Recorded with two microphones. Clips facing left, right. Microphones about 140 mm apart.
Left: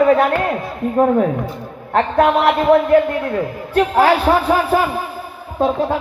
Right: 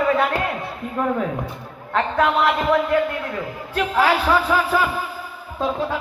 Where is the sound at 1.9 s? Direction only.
55° left (ahead or behind).